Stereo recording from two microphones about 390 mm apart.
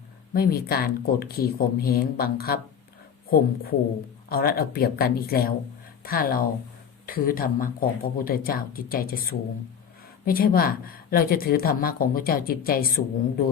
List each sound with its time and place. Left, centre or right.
0.3 s a woman's voice: left